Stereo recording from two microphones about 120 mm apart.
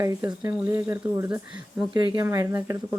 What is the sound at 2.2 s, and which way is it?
Speech, 30° right (ahead or behind).